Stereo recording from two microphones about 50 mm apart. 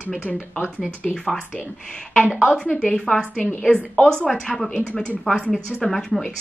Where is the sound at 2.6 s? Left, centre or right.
Centre.